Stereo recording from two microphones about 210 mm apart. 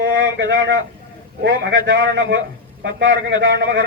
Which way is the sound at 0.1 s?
60° right (ahead or behind).